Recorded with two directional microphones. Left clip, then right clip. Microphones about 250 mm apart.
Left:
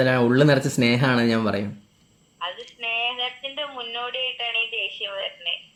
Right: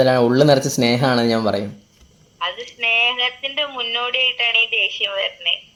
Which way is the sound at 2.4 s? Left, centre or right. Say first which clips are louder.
Right 8 dB; right.